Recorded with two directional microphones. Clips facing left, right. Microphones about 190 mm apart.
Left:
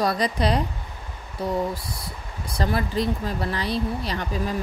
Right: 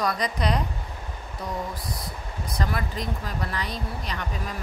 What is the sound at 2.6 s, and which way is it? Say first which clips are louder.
Speech: left 6 dB; 30° left (ahead or behind).